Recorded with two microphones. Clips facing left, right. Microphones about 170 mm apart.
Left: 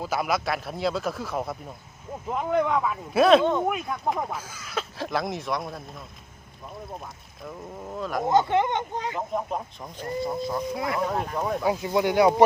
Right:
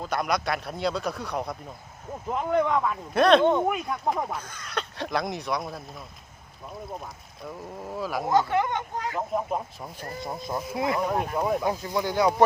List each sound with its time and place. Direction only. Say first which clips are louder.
0.0 s speech: left 1 dB; 5° left (ahead or behind)
7.4 s speech: even; 5° right (ahead or behind)
8.3 s speech: left 2 dB; 20° left (ahead or behind)
9.1 s speech: right 3 dB; 5° right (ahead or behind)
10.4 s speech: even; 20° right (ahead or behind)
11.3 s speech: right 3 dB; 5° right (ahead or behind)
11.6 s speech: left 3 dB; 15° left (ahead or behind)